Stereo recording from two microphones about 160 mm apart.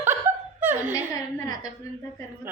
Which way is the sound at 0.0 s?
15° right (ahead or behind).